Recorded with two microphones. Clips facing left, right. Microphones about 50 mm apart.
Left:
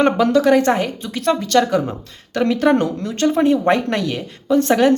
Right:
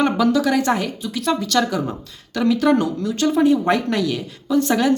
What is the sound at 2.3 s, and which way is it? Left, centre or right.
A woman's voice, left.